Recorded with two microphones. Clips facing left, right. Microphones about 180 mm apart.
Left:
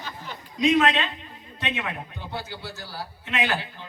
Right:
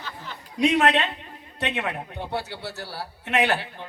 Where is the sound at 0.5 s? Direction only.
70° right (ahead or behind).